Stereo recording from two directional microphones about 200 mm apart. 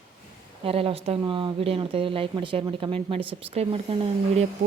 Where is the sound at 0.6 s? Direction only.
30° right (ahead or behind).